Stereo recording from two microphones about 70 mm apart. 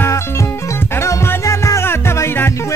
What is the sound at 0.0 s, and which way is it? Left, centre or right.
Music, left.